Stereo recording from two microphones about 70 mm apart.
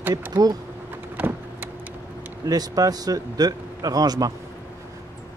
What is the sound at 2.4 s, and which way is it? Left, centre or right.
A man's voice, right.